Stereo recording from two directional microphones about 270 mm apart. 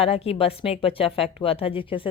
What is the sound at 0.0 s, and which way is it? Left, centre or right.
A woman's voice, left.